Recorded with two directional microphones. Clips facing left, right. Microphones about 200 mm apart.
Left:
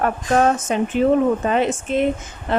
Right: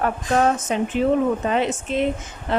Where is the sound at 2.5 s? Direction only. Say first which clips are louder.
Left 2 dB; 50° left (ahead or behind).